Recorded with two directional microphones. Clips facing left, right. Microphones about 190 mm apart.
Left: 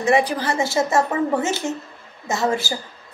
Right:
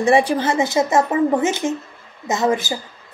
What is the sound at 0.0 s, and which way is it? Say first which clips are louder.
A woman's voice: right 3 dB; 30° right (ahead or behind).